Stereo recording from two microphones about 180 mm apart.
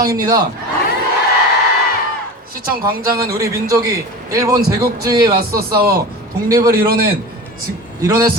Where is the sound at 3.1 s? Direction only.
15° right (ahead or behind).